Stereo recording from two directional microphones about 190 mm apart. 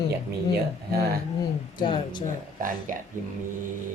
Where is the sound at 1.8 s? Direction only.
25° left (ahead or behind).